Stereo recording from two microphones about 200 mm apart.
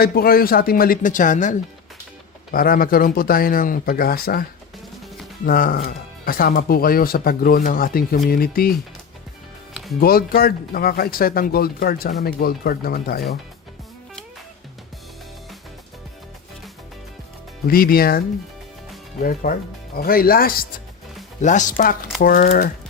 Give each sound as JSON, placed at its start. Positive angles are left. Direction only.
{"t": 0.0, "sound": "speech", "side_deg": 50}
{"t": 5.5, "sound": "speech", "side_deg": 45}
{"t": 10.0, "sound": "speech", "side_deg": 45}
{"t": 17.7, "sound": "speech", "side_deg": 50}
{"t": 19.2, "sound": "speech", "side_deg": 45}